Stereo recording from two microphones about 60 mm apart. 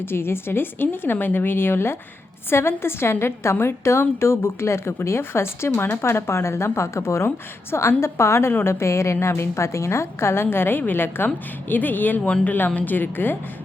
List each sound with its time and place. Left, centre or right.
0.0 s speech: left